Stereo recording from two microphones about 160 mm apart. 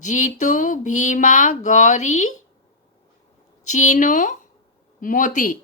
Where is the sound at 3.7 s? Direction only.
50° left (ahead or behind).